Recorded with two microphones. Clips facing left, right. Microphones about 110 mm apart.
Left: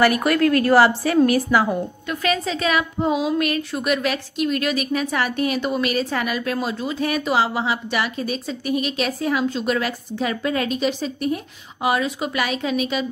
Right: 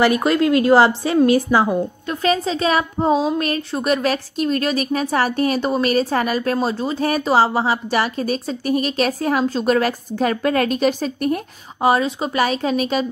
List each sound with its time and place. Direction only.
0.0 s a woman's voice: 20° right (ahead or behind); by 11.4 s 50° right (ahead or behind)
11.8 s a woman's voice: 30° right (ahead or behind)